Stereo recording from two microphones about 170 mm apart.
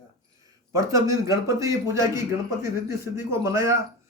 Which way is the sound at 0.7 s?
20° right (ahead or behind).